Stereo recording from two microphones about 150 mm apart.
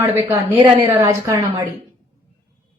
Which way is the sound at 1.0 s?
20° right (ahead or behind).